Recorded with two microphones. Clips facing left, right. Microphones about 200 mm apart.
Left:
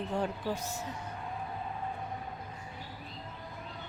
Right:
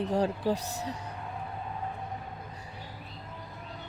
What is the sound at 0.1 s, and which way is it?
Speech, 35° right (ahead or behind).